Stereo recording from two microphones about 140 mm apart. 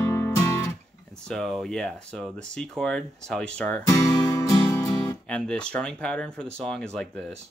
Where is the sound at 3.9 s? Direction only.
25° left (ahead or behind).